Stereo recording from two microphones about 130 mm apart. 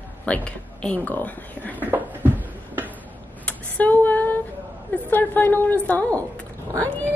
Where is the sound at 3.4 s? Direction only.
10° left (ahead or behind).